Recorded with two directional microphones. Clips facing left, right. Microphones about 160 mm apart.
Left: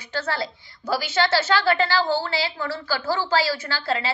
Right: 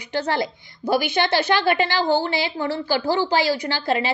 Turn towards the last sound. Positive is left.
turn(degrees=-20)  # may be behind; listen again after turning